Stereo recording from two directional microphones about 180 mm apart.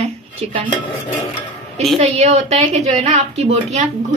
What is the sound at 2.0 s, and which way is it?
A woman's voice, 35° right (ahead or behind).